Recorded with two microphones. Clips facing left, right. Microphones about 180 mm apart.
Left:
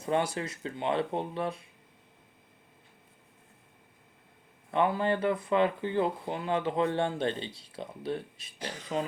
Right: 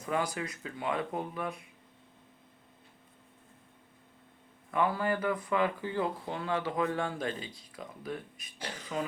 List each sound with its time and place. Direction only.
0.0 s speech: 30° left (ahead or behind)
4.7 s speech: 25° left (ahead or behind)